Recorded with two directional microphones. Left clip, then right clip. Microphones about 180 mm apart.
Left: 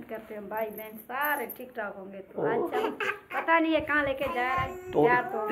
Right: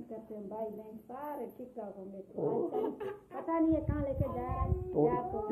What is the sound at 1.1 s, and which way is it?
Speech, centre (ahead or behind).